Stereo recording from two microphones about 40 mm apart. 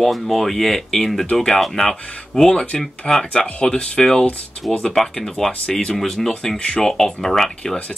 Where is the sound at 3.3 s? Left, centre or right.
Left.